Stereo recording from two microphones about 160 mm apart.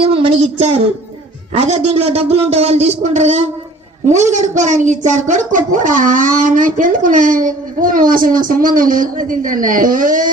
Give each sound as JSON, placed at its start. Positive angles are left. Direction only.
{"t": 0.0, "sound": "a woman's voice", "side_deg": -35}